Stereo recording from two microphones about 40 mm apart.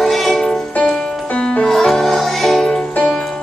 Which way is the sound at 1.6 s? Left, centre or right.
Centre.